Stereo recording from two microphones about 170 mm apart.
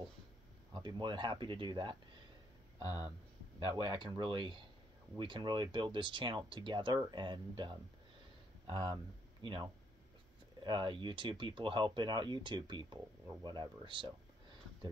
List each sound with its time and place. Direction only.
0.7 s speech: 25° right (ahead or behind)
2.8 s speech: 20° left (ahead or behind)
3.5 s speech: 30° right (ahead or behind)